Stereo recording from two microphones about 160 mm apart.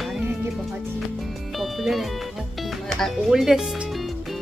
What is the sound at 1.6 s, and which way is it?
Music, centre (ahead or behind).